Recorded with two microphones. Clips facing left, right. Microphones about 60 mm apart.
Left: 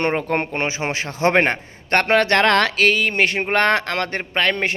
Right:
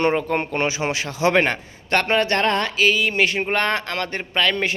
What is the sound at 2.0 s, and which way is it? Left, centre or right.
Speech, left.